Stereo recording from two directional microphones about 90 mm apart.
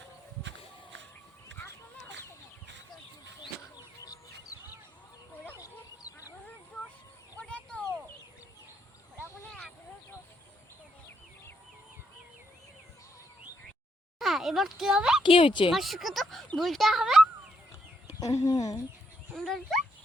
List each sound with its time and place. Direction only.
4.0 s bird: 40° left (ahead or behind)
5.5 s duck: 40° left (ahead or behind)
7.3 s a sound: 15° left (ahead or behind)
14.2 s speech: centre (ahead or behind)
15.2 s speech: 70° left (ahead or behind)
15.7 s speech: centre (ahead or behind)
18.2 s speech: 40° left (ahead or behind)
19.3 s dog: centre (ahead or behind)